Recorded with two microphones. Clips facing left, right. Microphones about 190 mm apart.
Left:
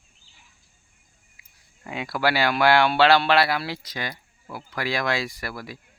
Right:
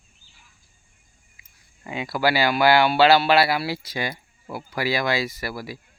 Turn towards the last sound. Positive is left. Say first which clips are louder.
# right 3 dB
turn(degrees=-5)  # may be behind; listen again after turning